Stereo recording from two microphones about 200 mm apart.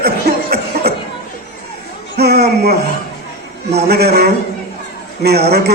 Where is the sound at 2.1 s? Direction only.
55° right (ahead or behind).